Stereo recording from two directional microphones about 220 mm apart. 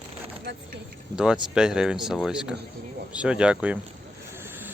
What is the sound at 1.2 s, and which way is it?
Speech, 5° right (ahead or behind).